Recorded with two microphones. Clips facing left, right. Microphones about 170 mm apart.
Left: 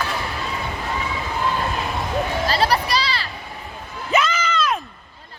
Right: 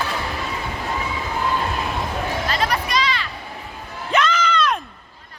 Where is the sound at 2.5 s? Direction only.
35° left (ahead or behind).